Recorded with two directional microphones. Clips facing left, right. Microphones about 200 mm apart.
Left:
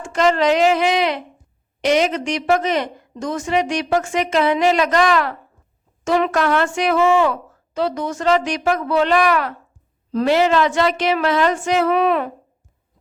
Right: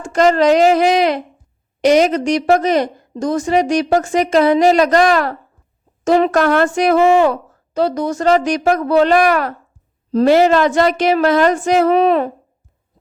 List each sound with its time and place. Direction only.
0.0 s a woman's voice: 40° right (ahead or behind)